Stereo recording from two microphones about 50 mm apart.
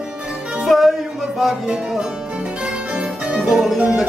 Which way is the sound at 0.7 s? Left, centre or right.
Centre.